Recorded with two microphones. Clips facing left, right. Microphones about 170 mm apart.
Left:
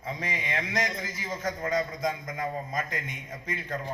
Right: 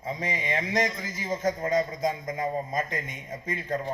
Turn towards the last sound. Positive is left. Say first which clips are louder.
# right 4 dB
turn(degrees=-20)  # may be behind; listen again after turning